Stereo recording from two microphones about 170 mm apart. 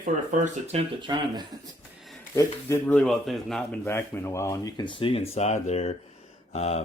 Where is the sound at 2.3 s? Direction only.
15° left (ahead or behind); by 3.8 s centre (ahead or behind).